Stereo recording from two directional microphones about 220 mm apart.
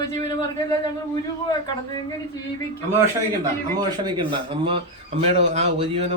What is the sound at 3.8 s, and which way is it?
Speech, 20° right (ahead or behind).